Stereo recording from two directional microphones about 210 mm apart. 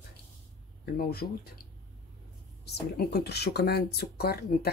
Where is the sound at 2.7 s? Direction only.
50° left (ahead or behind).